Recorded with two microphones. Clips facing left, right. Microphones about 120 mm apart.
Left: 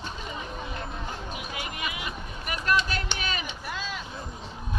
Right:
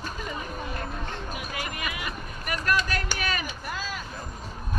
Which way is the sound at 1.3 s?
45° right (ahead or behind).